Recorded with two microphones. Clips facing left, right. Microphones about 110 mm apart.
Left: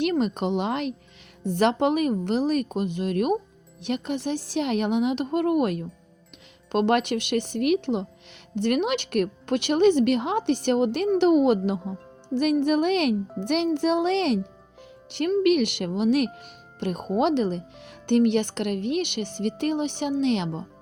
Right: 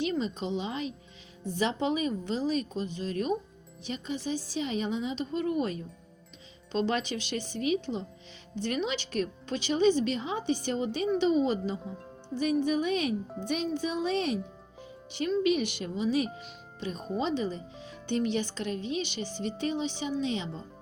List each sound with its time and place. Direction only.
0.0 s speech: 65° left (ahead or behind)